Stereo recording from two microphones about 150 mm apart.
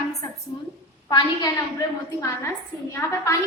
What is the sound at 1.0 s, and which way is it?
Speech, 30° left (ahead or behind).